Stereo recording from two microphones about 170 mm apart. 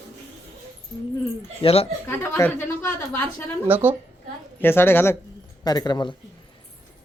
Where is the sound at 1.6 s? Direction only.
35° left (ahead or behind).